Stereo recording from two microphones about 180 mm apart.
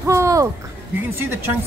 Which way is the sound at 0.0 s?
15° right (ahead or behind).